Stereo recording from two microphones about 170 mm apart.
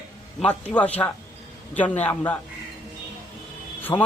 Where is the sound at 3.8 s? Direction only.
10° left (ahead or behind).